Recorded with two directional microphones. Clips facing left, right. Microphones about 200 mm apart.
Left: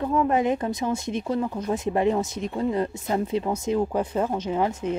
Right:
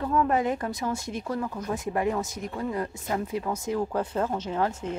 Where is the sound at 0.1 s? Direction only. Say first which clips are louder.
Left 2 dB; 20° left (ahead or behind).